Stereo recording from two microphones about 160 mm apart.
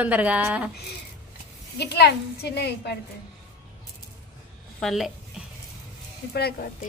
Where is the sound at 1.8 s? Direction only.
90° left.